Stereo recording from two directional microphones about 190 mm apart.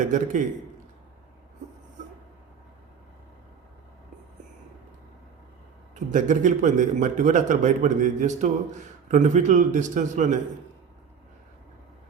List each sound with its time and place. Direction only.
0.0 s a man's voice: 40° right (ahead or behind)
5.9 s a man's voice: 40° right (ahead or behind)